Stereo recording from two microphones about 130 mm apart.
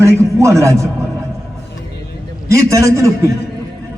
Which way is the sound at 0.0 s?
20° right (ahead or behind).